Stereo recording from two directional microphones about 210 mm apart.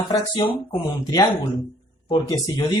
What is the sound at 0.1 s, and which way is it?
Speech, 20° left (ahead or behind).